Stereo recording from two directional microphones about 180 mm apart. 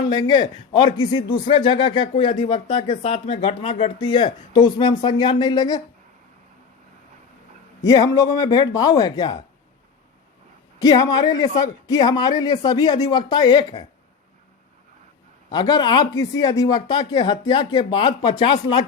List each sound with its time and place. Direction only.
0.1 s speech: 25° left (ahead or behind)
7.9 s speech: 20° left (ahead or behind)
10.8 s speech: 20° left (ahead or behind)
15.4 s speech: 25° left (ahead or behind)